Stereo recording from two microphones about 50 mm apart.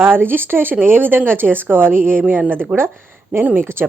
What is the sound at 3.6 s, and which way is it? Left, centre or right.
Speech, right.